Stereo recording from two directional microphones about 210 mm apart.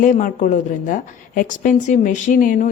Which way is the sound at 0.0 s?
40° left (ahead or behind).